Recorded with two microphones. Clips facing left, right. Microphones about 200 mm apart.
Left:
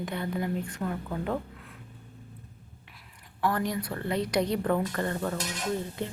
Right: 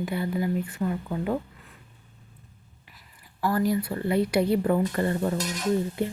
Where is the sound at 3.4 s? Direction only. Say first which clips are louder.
Right 4 dB; 5° right (ahead or behind).